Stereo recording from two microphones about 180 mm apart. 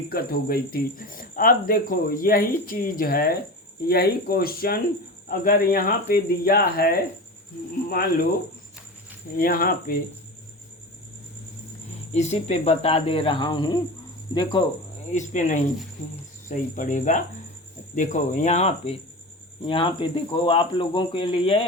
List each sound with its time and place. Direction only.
0.1 s speech: 55° left (ahead or behind)
9.4 s speech: 55° left (ahead or behind)
12.1 s speech: 40° left (ahead or behind)
15.1 s speech: 40° left (ahead or behind)